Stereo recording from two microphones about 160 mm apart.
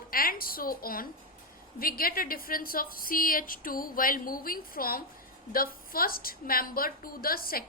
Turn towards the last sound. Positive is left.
turn(degrees=65)  # may be behind; listen again after turning